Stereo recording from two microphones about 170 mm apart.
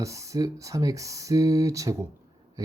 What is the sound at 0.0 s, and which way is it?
Speech, 20° right (ahead or behind).